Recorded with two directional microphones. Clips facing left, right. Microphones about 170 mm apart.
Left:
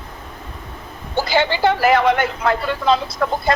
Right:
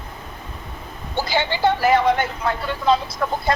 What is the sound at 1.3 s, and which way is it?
Speech, 90° left.